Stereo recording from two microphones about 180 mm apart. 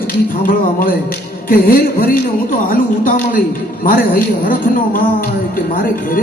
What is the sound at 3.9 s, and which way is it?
Speech, 50° left (ahead or behind).